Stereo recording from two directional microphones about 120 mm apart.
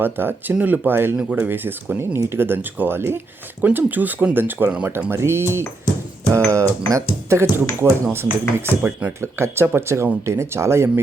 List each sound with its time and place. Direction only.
0.0 s speech: 15° right (ahead or behind)